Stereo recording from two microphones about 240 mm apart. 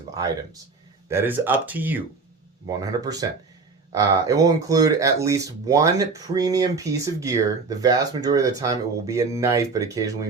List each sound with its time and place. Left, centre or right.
1.0 s speech: centre